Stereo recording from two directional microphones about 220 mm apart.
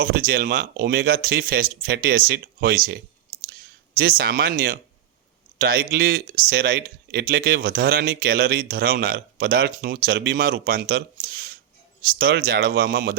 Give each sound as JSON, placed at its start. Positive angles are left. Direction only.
{"t": 0.0, "sound": "speech", "side_deg": -40}